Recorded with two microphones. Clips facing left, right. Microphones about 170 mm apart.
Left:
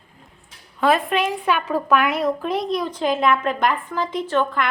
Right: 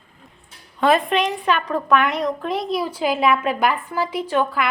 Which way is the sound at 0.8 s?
Centre (ahead or behind).